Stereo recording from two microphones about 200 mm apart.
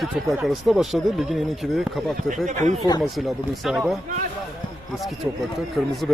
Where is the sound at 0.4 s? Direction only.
Centre (ahead or behind).